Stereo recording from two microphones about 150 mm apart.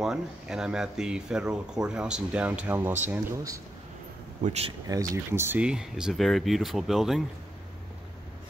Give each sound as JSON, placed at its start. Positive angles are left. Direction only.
{"t": 0.0, "sound": "speech", "side_deg": -5}
{"t": 4.4, "sound": "speech", "side_deg": -45}
{"t": 4.8, "sound": "speech", "side_deg": -20}